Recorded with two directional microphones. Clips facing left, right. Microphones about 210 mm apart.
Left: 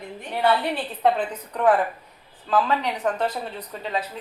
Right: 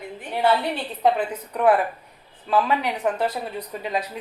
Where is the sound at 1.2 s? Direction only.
10° right (ahead or behind).